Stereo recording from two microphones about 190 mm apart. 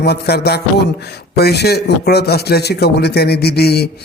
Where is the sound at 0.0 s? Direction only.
55° left (ahead or behind).